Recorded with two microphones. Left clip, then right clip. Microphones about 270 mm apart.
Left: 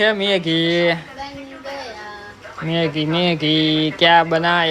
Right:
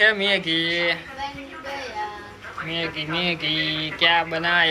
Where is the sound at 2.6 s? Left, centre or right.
Left.